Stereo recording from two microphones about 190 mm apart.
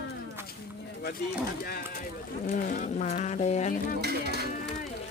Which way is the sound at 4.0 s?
60° right (ahead or behind).